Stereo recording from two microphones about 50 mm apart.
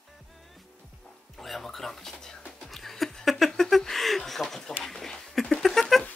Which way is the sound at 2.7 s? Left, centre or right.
Centre.